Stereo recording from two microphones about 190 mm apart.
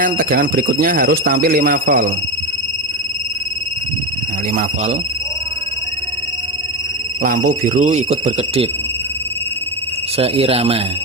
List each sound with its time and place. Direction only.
0.0 s speech: 45° right (ahead or behind)
4.5 s speech: 35° right (ahead or behind)
7.2 s speech: 45° right (ahead or behind)
10.2 s speech: 30° right (ahead or behind)